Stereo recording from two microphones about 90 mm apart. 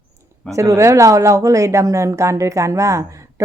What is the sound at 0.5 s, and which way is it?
Speech, 35° right (ahead or behind).